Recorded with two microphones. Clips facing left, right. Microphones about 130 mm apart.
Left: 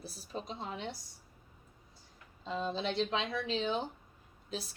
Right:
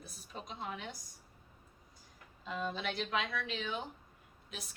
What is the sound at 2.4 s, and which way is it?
Speech, 30° left (ahead or behind).